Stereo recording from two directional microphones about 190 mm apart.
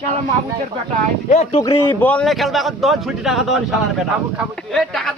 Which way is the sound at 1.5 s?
25° left (ahead or behind).